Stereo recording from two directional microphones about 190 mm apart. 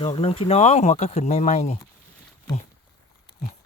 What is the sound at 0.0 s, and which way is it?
Speech, 30° left (ahead or behind).